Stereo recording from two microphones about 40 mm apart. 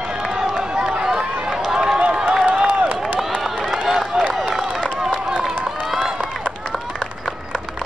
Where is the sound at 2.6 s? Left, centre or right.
Right.